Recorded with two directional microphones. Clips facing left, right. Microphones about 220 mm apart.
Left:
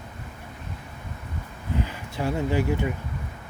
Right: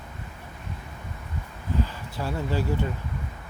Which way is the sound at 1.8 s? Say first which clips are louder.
Left 4 dB; 15° left (ahead or behind).